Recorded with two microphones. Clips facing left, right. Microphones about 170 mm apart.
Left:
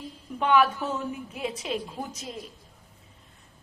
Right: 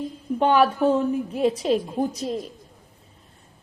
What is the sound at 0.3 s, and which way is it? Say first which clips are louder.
A woman's voice: right 4 dB; 35° right (ahead or behind).